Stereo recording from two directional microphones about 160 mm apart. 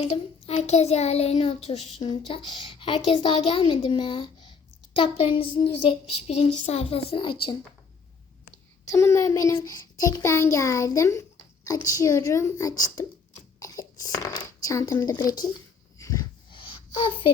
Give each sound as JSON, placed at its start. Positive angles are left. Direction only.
{"t": 0.0, "sound": "child singing", "side_deg": 40}
{"t": 8.9, "sound": "a child's voice", "side_deg": 15}
{"t": 16.0, "sound": "dog", "side_deg": 20}
{"t": 16.5, "sound": "a sound", "side_deg": 30}